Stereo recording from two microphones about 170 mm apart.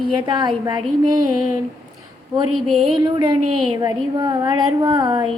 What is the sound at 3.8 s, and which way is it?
Speech, 20° right (ahead or behind).